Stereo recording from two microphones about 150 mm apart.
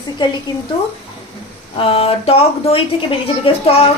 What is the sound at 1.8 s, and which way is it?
Speech, 40° left (ahead or behind).